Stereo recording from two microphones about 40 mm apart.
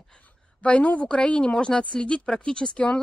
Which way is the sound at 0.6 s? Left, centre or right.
Left.